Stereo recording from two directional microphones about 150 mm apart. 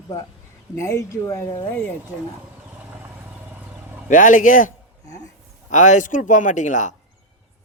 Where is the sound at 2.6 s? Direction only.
10° right (ahead or behind).